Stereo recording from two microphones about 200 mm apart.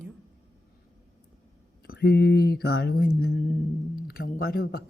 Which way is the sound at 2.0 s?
55° left (ahead or behind).